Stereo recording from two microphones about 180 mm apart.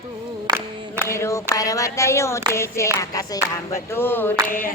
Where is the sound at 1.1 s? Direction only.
15° left (ahead or behind).